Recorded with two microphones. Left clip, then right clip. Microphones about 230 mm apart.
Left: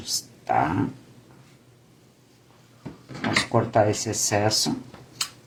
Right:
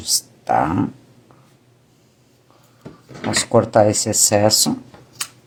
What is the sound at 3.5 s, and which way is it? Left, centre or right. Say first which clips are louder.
Speech: right 9 dB; right.